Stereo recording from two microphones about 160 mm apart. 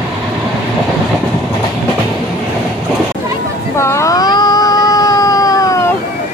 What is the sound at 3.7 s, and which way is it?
Cat, 15° left (ahead or behind).